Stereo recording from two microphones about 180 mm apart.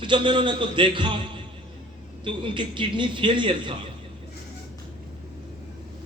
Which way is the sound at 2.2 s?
25° right (ahead or behind).